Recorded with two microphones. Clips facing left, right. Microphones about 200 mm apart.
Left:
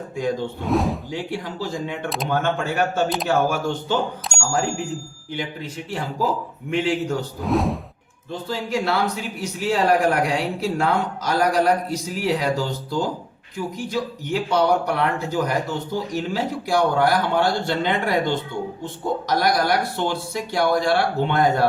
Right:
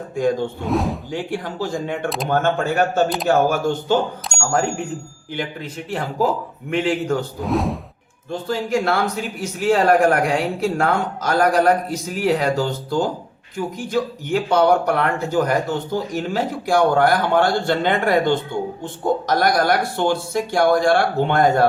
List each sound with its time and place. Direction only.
0.2 s speech: 50° right (ahead or behind)
0.6 s a sound: centre (ahead or behind)
1.1 s speech: 50° right (ahead or behind)
5.9 s speech: 55° right (ahead or behind)
7.4 s a sound: centre (ahead or behind)
8.3 s speech: 50° right (ahead or behind)